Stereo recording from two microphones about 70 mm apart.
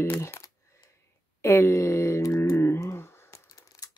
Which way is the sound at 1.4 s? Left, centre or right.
Left.